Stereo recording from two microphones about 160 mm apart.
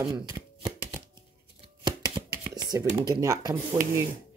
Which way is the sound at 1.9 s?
25° right (ahead or behind).